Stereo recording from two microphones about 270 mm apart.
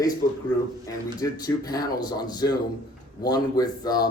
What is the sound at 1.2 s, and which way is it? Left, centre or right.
Speech, centre.